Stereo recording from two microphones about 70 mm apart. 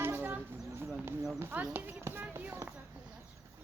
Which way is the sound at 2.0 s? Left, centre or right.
Right.